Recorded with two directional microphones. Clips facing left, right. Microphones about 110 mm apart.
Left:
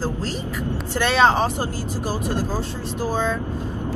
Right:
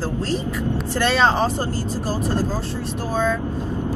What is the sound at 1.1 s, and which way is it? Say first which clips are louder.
Speech: left 2 dB; 15° left (ahead or behind).